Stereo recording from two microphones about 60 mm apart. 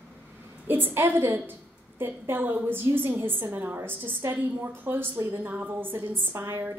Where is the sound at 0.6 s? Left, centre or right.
Right.